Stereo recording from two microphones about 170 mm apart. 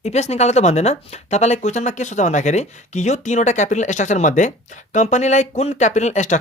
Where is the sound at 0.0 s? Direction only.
40° left (ahead or behind).